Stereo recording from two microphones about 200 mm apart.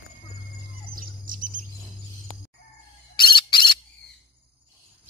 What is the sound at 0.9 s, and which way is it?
Bird, 45° right (ahead or behind).